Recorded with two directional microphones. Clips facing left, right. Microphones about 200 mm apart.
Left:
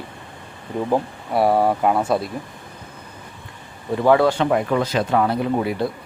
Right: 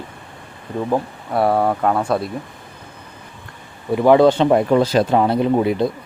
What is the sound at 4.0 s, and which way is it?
Speech, 20° right (ahead or behind).